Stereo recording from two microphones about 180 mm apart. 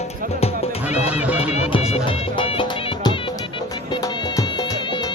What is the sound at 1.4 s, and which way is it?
Music, 35° left (ahead or behind).